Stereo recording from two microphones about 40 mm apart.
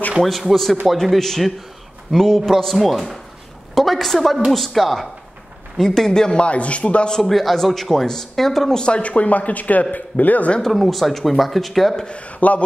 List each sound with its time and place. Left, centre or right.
0.2 s a man's voice: centre; by 7.1 s left
7.1 s speech: centre
8.8 s speech: left
10.7 s speech: centre
12.1 s speech: left